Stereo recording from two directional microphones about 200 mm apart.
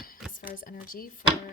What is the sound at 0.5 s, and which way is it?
Speech, 45° left (ahead or behind).